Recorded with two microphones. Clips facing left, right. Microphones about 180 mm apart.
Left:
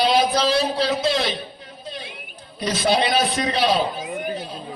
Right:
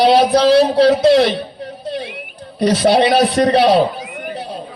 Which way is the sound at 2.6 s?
65° right (ahead or behind).